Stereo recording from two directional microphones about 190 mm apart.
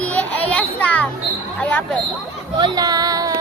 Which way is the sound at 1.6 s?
5° left (ahead or behind).